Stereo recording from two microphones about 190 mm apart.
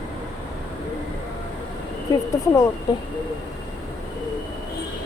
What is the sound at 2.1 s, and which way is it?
Speech, 15° left (ahead or behind).